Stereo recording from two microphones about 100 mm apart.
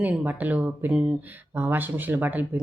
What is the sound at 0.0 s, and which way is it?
Speech, 15° right (ahead or behind).